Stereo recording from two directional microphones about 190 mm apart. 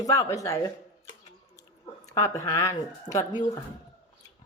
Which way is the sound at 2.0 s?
15° left (ahead or behind).